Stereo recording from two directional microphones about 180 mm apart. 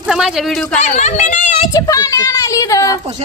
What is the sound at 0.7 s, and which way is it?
Speech, 40° left (ahead or behind).